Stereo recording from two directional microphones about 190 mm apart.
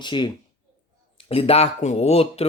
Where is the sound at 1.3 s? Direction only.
30° left (ahead or behind).